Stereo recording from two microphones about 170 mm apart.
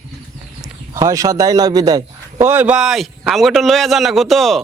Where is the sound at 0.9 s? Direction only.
20° right (ahead or behind); by 4.6 s centre (ahead or behind).